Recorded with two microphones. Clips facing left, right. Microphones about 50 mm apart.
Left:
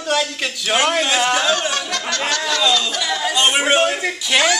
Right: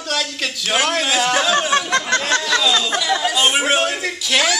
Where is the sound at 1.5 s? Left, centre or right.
Right.